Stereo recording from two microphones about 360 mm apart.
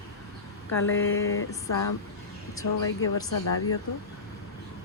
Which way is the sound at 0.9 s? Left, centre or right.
Left.